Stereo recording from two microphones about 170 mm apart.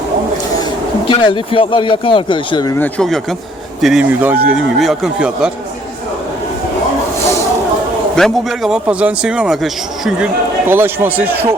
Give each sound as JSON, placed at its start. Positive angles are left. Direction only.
{"t": 1.0, "sound": "speech", "side_deg": 30}
{"t": 2.7, "sound": "speech", "side_deg": 5}
{"t": 8.1, "sound": "speech", "side_deg": 0}
{"t": 10.7, "sound": "speech", "side_deg": -15}